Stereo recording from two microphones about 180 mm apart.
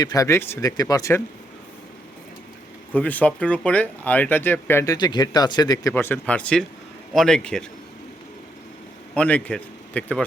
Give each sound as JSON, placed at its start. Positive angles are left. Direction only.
{"t": 0.0, "sound": "speech", "side_deg": 20}
{"t": 2.9, "sound": "a man's voice", "side_deg": 10}
{"t": 9.1, "sound": "speech", "side_deg": 5}